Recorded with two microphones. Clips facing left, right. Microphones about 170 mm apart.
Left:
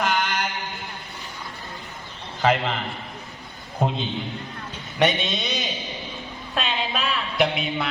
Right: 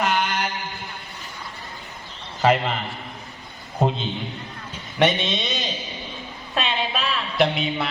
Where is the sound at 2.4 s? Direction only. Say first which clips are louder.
Right 2 dB; 5° right (ahead or behind).